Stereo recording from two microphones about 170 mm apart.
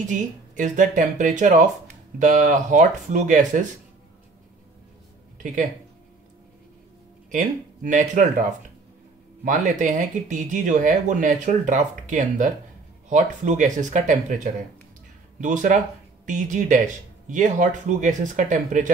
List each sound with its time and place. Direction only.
0.0 s speech: 50° right (ahead or behind)
5.4 s speech: 50° right (ahead or behind)
7.2 s speech: 50° right (ahead or behind)